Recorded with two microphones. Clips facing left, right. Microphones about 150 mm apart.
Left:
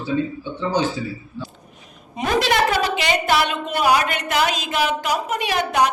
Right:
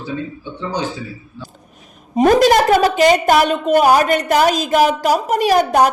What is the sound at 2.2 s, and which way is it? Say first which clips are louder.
A woman's voice: right 8 dB; 45° right (ahead or behind).